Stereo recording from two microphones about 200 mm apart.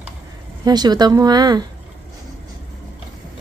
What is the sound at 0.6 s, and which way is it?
Speech, 20° right (ahead or behind).